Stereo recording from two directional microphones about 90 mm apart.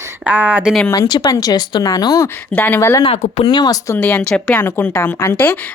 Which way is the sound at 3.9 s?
20° left (ahead or behind).